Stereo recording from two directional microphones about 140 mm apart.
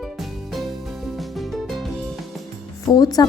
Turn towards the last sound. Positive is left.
turn(degrees=25)  # may be behind; listen again after turning